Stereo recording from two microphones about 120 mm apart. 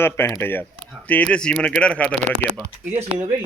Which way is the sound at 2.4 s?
20° left (ahead or behind).